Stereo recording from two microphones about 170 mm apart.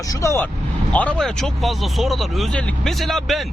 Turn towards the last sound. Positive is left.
turn(degrees=0)  # may be behind; listen again after turning